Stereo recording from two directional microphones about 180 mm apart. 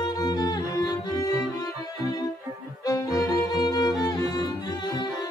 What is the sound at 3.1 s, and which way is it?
Music, 20° left (ahead or behind).